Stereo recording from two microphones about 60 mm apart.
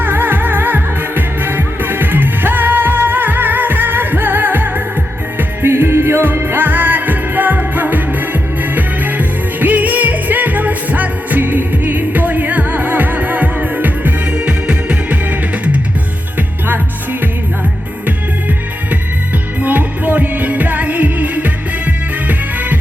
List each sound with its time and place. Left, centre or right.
0.0 s music: right
19.5 s music: right